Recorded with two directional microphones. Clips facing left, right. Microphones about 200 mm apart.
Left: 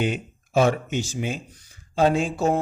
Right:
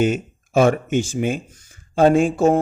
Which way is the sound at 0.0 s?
45° right (ahead or behind).